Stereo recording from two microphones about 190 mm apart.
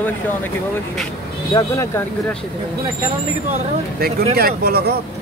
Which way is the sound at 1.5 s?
15° left (ahead or behind).